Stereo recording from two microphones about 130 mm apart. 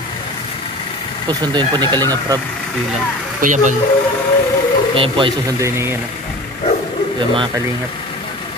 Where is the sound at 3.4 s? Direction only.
80° right.